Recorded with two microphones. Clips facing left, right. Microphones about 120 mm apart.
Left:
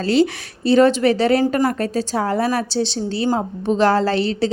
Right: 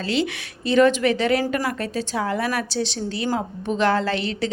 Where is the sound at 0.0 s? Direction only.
40° left (ahead or behind).